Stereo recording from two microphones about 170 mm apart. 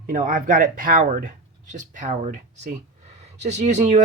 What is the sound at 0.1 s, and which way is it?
Speech, 55° right (ahead or behind).